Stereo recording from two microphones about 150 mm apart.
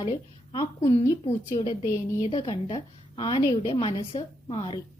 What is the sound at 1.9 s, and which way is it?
Speech, 20° left (ahead or behind).